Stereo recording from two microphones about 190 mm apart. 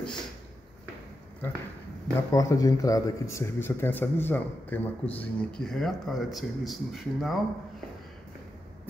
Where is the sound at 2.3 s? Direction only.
20° left (ahead or behind); by 7.3 s centre (ahead or behind).